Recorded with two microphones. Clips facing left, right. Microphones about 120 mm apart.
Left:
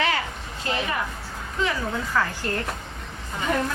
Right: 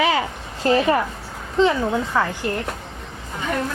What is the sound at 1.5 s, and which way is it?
Speech, 25° right (ahead or behind).